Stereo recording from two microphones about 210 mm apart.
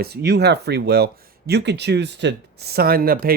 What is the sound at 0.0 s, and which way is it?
Speech, 50° right (ahead or behind).